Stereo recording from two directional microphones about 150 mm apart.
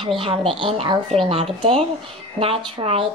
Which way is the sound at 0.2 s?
35° right (ahead or behind).